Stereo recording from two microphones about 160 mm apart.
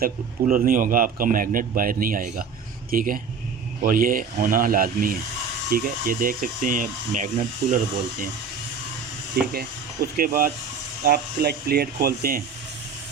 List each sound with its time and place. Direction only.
0.0 s a man's voice: 65° right (ahead or behind)
9.4 s speech: 75° right (ahead or behind)
10.2 s a man's voice: 65° right (ahead or behind)
11.0 s speech: 75° right (ahead or behind)